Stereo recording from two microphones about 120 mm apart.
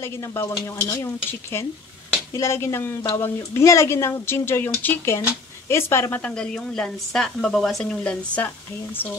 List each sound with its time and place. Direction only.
0.0 s speech: 25° left (ahead or behind)
2.3 s speech: 25° left (ahead or behind)
6.2 s speech: 5° left (ahead or behind)